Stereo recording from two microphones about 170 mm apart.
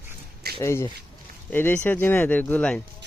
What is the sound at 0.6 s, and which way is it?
Speech, 15° left (ahead or behind).